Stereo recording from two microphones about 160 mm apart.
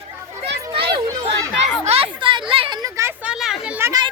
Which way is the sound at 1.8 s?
40° right (ahead or behind).